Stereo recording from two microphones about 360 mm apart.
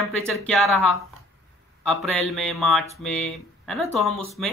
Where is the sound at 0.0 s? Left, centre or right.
Centre.